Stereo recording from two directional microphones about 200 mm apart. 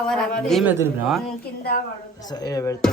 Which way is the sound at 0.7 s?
10° right (ahead or behind).